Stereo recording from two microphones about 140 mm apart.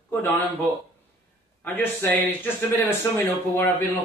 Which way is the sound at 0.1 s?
15° left (ahead or behind).